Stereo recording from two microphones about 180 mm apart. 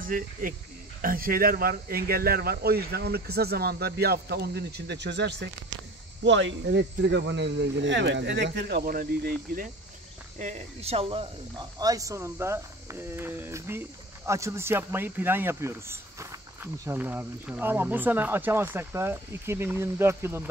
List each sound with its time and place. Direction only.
0.0 s speech: 50° right (ahead or behind); by 5.8 s 70° right (ahead or behind)
6.2 s speech: 85° right; by 9.7 s 50° right (ahead or behind)
10.4 s speech: 35° right (ahead or behind); by 20.4 s 15° right (ahead or behind)